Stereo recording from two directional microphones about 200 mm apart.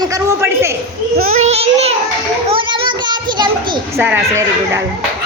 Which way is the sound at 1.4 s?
30° right (ahead or behind).